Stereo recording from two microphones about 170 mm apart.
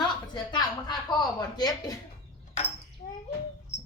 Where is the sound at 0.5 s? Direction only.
25° left (ahead or behind).